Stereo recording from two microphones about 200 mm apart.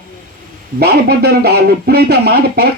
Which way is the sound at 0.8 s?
50° right (ahead or behind).